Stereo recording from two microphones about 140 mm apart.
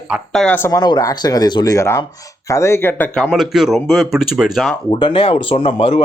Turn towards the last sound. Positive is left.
turn(degrees=45)  # may be behind; listen again after turning